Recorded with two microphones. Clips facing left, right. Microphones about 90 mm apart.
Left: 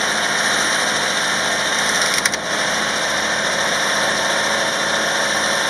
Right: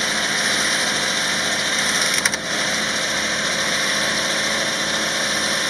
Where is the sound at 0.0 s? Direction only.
45° left (ahead or behind).